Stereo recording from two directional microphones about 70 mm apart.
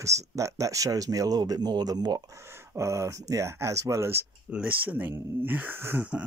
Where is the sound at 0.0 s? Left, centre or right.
Right.